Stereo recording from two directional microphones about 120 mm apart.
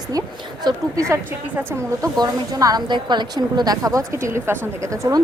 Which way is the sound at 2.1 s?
35° right (ahead or behind).